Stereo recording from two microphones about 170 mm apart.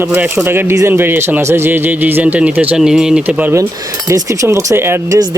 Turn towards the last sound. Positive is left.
turn(degrees=-15)  # may be behind; listen again after turning